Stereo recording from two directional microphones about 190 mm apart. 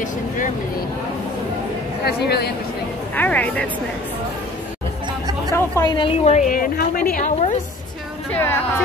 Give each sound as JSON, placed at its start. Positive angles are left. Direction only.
{"t": 2.0, "sound": "speech", "side_deg": 60}
{"t": 3.2, "sound": "speech", "side_deg": 10}
{"t": 5.5, "sound": "a woman's voice", "side_deg": 20}
{"t": 6.2, "sound": "a woman's voice", "side_deg": 40}
{"t": 8.3, "sound": "speech", "side_deg": 10}